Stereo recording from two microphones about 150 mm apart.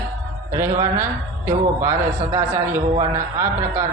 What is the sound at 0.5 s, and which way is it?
A man's voice, 15° right (ahead or behind).